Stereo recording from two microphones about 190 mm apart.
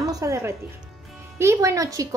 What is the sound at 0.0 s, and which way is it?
Music, 15° right (ahead or behind).